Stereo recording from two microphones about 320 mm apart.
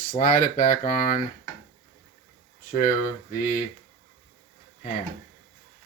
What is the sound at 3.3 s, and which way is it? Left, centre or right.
Speech, left.